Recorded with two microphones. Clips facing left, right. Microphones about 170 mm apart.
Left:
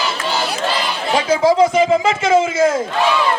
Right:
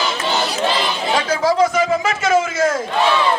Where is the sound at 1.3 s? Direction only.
25° left (ahead or behind).